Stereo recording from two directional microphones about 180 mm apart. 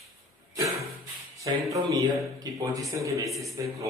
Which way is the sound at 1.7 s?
20° right (ahead or behind).